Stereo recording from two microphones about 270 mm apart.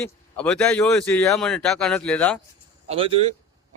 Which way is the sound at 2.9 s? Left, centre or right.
Right.